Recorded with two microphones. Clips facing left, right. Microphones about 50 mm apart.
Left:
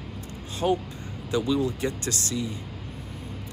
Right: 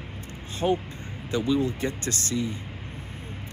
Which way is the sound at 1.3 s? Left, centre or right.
Right.